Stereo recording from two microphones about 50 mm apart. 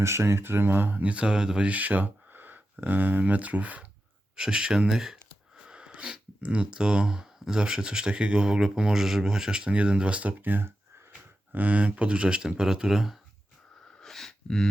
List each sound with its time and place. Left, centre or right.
0.0 s speech: right
1.0 s speech: right
4.4 s speech: centre
10.4 s speech: right
11.5 s speech: right; by 13.1 s centre
14.0 s a sound: centre